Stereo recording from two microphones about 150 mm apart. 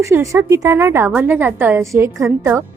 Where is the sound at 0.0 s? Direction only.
20° right (ahead or behind).